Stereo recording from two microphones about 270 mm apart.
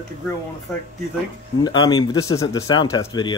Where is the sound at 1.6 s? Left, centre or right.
Centre.